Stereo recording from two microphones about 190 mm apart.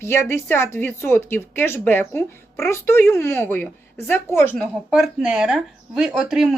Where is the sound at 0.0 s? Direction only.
15° left (ahead or behind).